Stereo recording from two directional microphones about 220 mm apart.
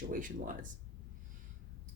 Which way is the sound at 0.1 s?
40° right (ahead or behind).